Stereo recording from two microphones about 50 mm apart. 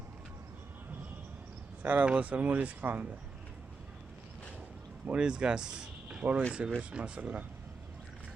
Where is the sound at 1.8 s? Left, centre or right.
Right.